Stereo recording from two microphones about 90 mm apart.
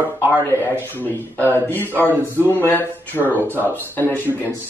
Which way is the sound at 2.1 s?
25° right (ahead or behind).